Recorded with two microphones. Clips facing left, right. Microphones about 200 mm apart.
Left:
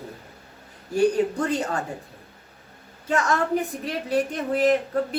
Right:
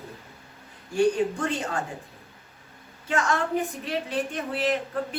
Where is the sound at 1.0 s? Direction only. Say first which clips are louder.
Left 2 dB; 40° left (ahead or behind).